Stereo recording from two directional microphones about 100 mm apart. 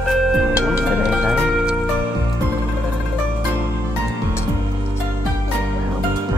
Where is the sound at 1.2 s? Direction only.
10° right (ahead or behind).